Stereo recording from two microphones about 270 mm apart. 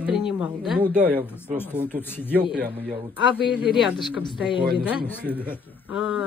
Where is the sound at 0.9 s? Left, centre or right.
Centre.